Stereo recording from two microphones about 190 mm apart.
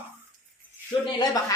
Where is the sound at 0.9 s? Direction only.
20° left (ahead or behind).